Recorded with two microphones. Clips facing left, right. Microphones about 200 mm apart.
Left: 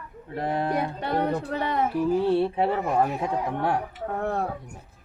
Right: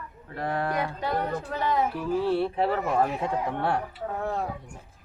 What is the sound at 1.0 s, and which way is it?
Speech, 60° left (ahead or behind).